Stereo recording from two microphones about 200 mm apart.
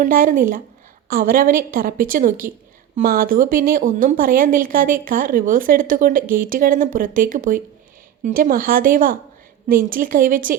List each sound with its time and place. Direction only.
0.0 s a woman's voice: 40° right (ahead or behind)